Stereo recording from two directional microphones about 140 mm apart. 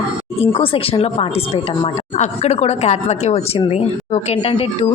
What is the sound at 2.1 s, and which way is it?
Speech, 55° left (ahead or behind).